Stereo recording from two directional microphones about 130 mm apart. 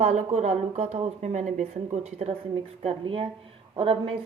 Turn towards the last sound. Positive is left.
turn(degrees=-45)  # may be behind; listen again after turning